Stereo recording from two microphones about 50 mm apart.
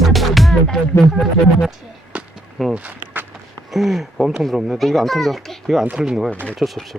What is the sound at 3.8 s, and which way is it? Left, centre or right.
A child's voice, centre.